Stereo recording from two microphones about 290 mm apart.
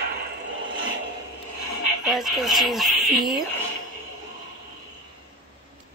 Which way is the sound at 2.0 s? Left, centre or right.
Centre.